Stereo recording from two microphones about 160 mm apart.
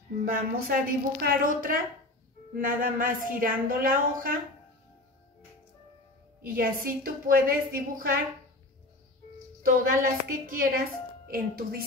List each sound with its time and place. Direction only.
0.2 s a woman's voice: 70° right (ahead or behind)
6.5 s a woman's voice: 65° right (ahead or behind)
9.7 s a woman's voice: 65° right (ahead or behind)